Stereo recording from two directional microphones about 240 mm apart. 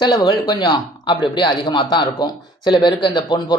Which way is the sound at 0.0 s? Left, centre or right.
Centre.